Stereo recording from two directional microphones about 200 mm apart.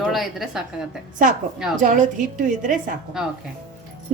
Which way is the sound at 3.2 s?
5° right (ahead or behind).